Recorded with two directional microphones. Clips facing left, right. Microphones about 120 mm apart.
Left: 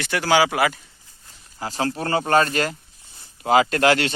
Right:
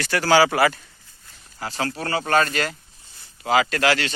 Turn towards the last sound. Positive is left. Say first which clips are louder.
# left 3 dB
turn(degrees=45)  # may be behind; listen again after turning